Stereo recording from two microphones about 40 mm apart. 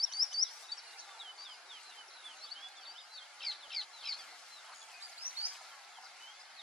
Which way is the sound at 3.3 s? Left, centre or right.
Centre.